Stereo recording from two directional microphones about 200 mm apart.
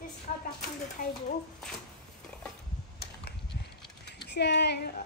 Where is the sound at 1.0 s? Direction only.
45° left (ahead or behind).